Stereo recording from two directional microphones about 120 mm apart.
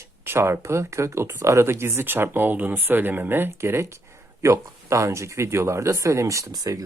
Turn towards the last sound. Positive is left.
turn(degrees=-30)  # may be behind; listen again after turning